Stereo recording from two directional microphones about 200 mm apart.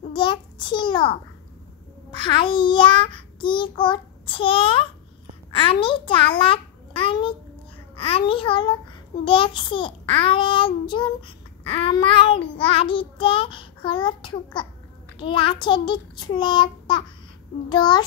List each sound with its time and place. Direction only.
0.1 s a sound: 25° left (ahead or behind)
2.1 s child singing: 25° left (ahead or behind)
5.5 s a child's voice: 25° left (ahead or behind)
7.9 s child singing: 30° left (ahead or behind)